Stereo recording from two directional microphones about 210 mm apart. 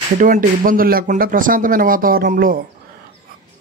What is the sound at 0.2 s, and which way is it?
Speech, 40° right (ahead or behind).